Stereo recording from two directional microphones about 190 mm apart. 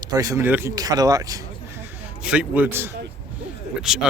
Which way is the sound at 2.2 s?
10° right (ahead or behind).